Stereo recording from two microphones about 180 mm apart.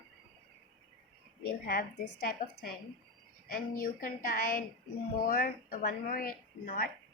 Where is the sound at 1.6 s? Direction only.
55° left (ahead or behind).